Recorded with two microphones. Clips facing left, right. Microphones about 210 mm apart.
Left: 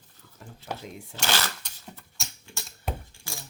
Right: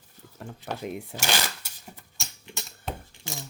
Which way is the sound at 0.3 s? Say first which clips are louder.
Right 3 dB; 60° right (ahead or behind).